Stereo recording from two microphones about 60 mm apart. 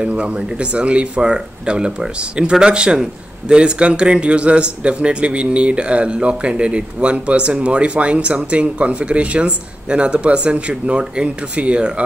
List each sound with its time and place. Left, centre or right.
0.0 s speech: centre